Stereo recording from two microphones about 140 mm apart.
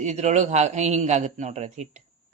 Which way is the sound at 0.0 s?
55° right (ahead or behind).